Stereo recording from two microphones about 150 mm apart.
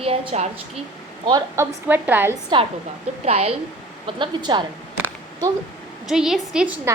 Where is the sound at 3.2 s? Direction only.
45° right (ahead or behind).